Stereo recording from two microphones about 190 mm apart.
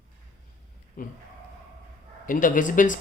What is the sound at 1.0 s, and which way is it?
Speech, 50° left (ahead or behind).